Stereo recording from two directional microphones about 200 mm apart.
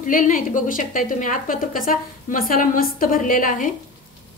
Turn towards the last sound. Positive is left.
turn(degrees=40)  # may be behind; listen again after turning